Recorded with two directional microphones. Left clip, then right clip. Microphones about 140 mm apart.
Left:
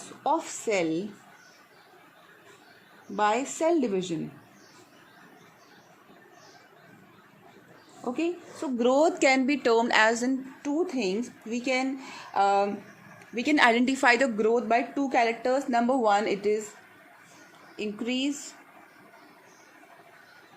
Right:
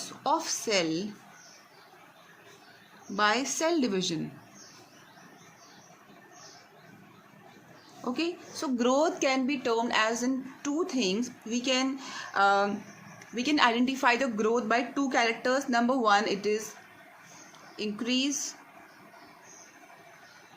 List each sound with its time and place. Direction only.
0.4 s speech: 15° left (ahead or behind)
3.2 s speech: 15° left (ahead or behind)
8.1 s speech: 10° left (ahead or behind)
8.9 s a woman's voice: 20° left (ahead or behind)
10.8 s a woman's voice: 20° left (ahead or behind)
14.4 s speech: 20° left (ahead or behind)
17.7 s speech: 25° left (ahead or behind)